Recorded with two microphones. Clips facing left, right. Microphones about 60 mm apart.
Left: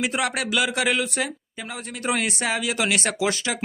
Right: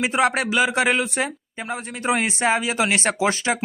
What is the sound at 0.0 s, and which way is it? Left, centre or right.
Speech, right.